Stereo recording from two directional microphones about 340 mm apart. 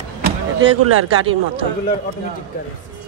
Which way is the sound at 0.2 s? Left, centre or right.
Right.